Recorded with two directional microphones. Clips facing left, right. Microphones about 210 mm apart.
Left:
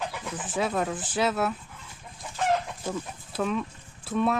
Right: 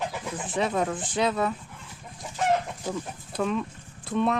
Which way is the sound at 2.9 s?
Centre (ahead or behind).